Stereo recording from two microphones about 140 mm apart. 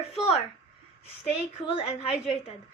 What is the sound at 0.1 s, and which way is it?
Speech, 45° left (ahead or behind).